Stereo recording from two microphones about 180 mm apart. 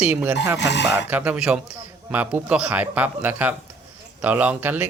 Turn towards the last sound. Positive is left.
turn(degrees=-10)  # may be behind; listen again after turning